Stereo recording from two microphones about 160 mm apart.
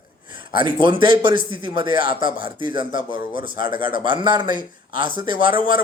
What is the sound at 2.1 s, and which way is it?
Speech, 60° left (ahead or behind).